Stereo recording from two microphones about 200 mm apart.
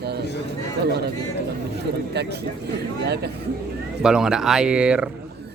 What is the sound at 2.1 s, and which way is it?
Speech, 55° right (ahead or behind).